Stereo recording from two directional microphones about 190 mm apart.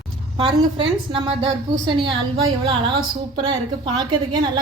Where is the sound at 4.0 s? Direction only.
25° right (ahead or behind).